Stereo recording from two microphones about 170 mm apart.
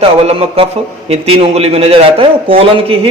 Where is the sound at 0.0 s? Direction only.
35° right (ahead or behind).